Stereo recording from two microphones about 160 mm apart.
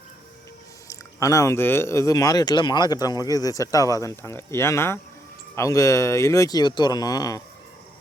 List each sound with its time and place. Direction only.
0.9 s speech: 20° left (ahead or behind)